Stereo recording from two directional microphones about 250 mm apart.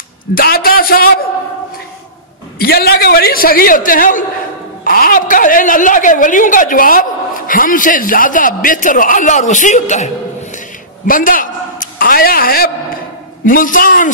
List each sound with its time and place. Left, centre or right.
0.3 s a woman's voice: left
2.6 s a woman's voice: left